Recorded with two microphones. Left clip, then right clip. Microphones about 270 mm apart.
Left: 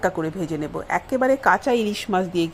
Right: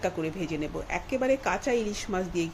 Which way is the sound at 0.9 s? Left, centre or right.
Centre.